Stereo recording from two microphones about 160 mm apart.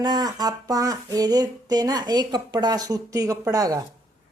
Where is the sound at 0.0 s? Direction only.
25° right (ahead or behind).